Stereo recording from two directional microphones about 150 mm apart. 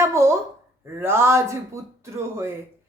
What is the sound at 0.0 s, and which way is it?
Speech, 20° right (ahead or behind).